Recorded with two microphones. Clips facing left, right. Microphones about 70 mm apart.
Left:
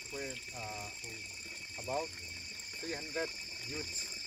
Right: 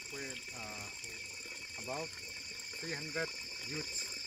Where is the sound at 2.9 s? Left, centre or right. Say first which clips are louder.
Left 1 dB; centre.